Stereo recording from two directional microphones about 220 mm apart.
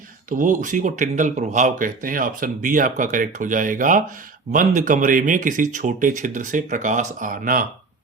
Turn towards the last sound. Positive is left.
turn(degrees=-40)  # may be behind; listen again after turning